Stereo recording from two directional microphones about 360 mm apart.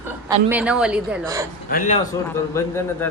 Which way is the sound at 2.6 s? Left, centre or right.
Centre.